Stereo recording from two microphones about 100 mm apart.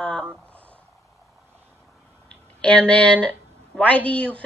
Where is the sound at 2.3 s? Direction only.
10° left (ahead or behind).